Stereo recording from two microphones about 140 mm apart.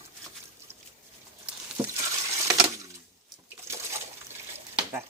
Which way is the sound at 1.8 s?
15° right (ahead or behind).